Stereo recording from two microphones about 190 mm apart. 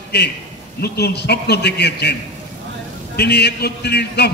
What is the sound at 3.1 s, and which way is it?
A man's voice, 60° left (ahead or behind).